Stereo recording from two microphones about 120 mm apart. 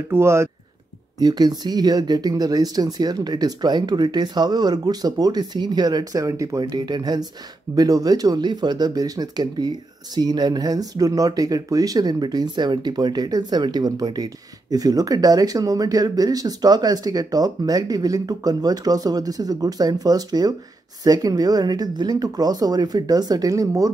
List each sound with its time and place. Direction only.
0.1 s speech: 20° right (ahead or behind)
1.2 s speech: 35° right (ahead or behind)